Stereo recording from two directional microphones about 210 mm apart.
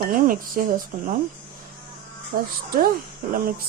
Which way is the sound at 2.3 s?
45° right (ahead or behind).